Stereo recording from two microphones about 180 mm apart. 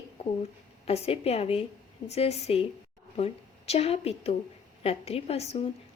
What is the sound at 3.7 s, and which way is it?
A woman's voice, 35° left (ahead or behind).